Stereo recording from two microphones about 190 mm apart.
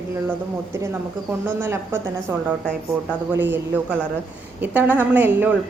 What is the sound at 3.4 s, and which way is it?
A woman's voice, 10° right (ahead or behind).